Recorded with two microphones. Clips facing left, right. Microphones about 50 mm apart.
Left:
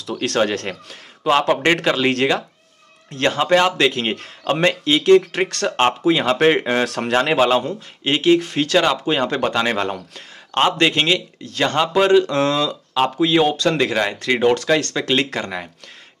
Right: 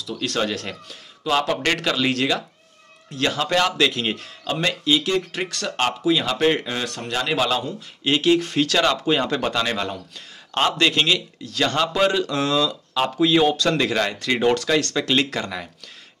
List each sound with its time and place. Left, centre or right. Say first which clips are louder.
0.0 s speech: left 4 dB; left
0.5 s speech: left 4 dB; left
3.3 s a man's voice: left 5 dB; left
3.9 s a man's voice: left 3 dB; left
7.3 s a man's voice: left 6 dB; left
15.0 s a man's voice: left 1 dB; centre